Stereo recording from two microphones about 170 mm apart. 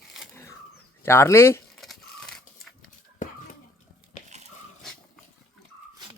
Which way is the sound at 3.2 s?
50° left (ahead or behind).